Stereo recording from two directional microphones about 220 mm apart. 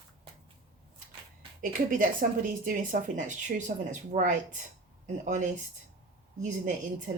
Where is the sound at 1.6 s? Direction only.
40° right (ahead or behind).